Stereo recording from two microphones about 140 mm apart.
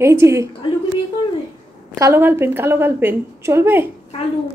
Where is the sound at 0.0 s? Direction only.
20° right (ahead or behind).